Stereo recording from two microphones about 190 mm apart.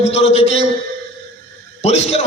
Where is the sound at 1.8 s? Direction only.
35° left (ahead or behind).